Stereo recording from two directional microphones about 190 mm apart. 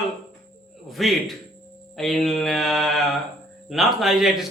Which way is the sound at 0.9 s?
Centre (ahead or behind).